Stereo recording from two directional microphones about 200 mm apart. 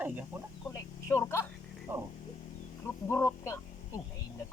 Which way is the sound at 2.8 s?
15° left (ahead or behind).